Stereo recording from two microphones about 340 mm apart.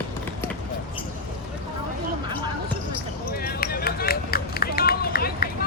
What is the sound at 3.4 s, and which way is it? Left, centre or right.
Run, left.